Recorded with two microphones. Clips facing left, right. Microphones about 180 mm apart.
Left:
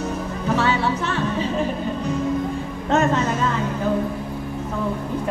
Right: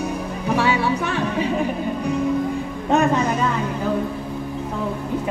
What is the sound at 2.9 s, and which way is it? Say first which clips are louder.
Music: right 1 dB; 15° right (ahead or behind).